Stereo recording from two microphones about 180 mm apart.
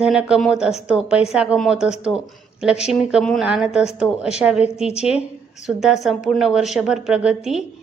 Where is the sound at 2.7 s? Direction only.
35° left (ahead or behind).